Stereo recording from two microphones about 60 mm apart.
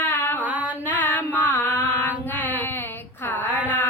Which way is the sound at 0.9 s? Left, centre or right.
Left.